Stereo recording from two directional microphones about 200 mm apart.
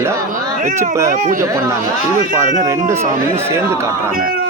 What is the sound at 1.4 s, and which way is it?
Speech, 15° right (ahead or behind).